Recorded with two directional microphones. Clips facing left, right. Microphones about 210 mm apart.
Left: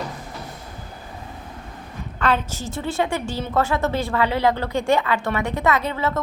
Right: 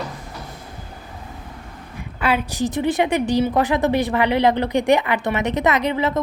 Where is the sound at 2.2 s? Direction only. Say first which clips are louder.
Right 2 dB; 10° right (ahead or behind).